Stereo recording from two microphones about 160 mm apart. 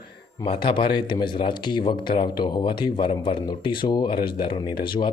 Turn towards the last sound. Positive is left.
turn(degrees=30)  # may be behind; listen again after turning